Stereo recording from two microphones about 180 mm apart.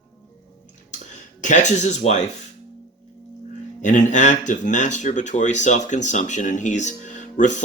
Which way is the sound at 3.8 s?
45° left (ahead or behind).